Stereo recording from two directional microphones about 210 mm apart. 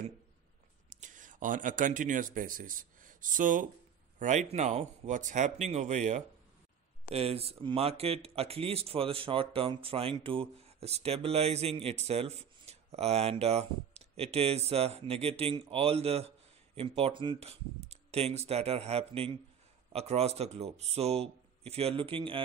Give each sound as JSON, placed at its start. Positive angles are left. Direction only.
{"t": 0.8, "sound": "a man's voice", "side_deg": -40}